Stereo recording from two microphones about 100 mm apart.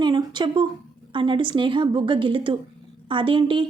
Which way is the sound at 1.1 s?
55° right (ahead or behind).